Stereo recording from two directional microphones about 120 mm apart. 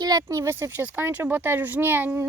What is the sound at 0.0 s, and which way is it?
Speech, 30° right (ahead or behind).